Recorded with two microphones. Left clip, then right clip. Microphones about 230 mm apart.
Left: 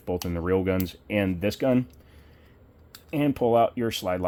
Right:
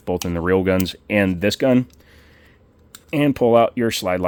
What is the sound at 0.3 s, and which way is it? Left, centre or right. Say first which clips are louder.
Speech: right 7 dB; right.